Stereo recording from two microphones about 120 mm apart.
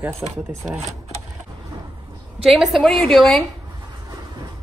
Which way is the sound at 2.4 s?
Centre (ahead or behind).